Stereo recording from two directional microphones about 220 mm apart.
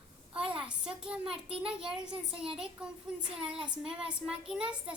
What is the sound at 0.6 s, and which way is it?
A woman's voice, 5° right (ahead or behind).